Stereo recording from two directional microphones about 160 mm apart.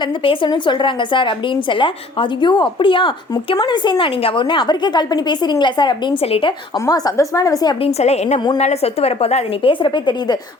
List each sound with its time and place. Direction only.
0.2 s a woman's voice: 30° left (ahead or behind)
6.7 s a woman's voice: 20° left (ahead or behind)
7.9 s a woman's voice: 40° left (ahead or behind)